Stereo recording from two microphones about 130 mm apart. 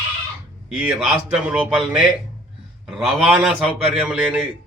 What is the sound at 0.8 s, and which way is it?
A man's voice, 10° right (ahead or behind).